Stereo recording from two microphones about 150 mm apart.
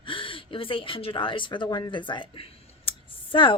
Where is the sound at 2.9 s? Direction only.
35° left (ahead or behind).